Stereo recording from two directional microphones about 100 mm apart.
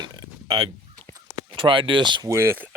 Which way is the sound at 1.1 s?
55° right (ahead or behind).